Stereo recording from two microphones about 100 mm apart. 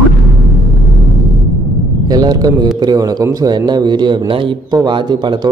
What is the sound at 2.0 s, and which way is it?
A man's voice, 40° right (ahead or behind).